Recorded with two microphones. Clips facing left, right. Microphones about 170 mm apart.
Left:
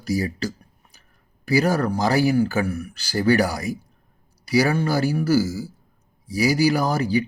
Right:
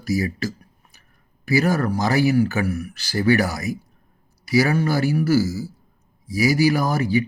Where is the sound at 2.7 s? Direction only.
35° left (ahead or behind).